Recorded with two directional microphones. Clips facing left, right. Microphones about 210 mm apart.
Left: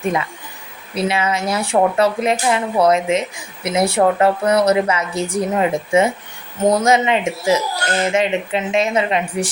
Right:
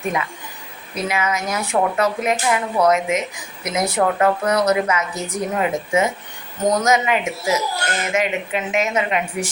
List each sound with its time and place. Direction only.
0.9 s speech: 30° left (ahead or behind)